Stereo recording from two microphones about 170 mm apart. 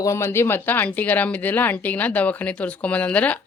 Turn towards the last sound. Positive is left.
turn(degrees=10)  # may be behind; listen again after turning